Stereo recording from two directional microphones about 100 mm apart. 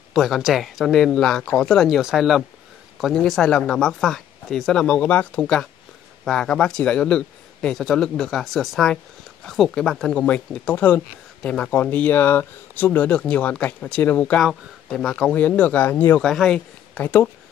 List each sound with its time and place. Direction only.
0.1 s speech: centre (ahead or behind)
14.4 s speech: 5° left (ahead or behind); by 16.2 s 20° left (ahead or behind)
16.2 s speech: 5° left (ahead or behind)
17.0 s speech: 20° left (ahead or behind)